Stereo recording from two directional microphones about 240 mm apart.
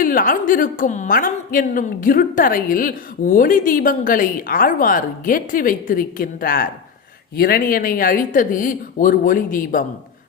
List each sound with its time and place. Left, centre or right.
0.0 s a woman's voice: left